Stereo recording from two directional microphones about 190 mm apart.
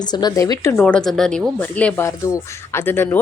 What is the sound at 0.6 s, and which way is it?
Speech, 10° left (ahead or behind).